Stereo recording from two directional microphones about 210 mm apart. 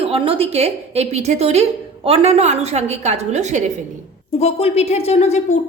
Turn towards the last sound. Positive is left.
turn(degrees=30)  # may be behind; listen again after turning